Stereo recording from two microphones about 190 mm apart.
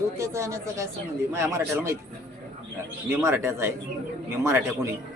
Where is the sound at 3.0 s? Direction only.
15° right (ahead or behind).